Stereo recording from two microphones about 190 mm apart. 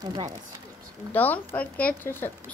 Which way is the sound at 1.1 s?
10° left (ahead or behind).